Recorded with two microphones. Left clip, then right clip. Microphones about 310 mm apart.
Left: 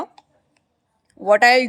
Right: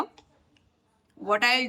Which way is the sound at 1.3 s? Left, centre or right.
Centre.